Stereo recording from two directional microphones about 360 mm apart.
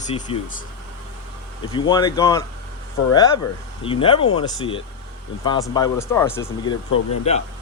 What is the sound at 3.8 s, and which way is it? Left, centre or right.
A man's voice, centre.